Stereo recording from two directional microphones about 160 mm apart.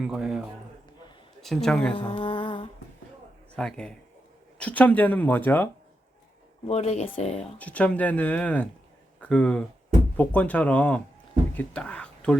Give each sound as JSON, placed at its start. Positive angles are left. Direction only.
{"t": 0.0, "sound": "speech", "side_deg": -5}
{"t": 1.9, "sound": "mantra", "side_deg": 35}
{"t": 3.5, "sound": "a man's voice", "side_deg": 5}
{"t": 6.7, "sound": "speech", "side_deg": 45}
{"t": 7.6, "sound": "speech", "side_deg": 10}